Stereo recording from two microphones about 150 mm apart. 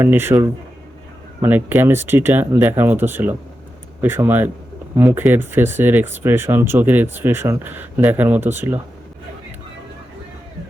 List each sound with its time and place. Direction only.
0.0 s speech: 15° right (ahead or behind)